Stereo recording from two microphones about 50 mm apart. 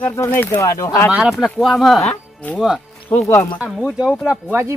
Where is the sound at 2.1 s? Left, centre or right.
Left.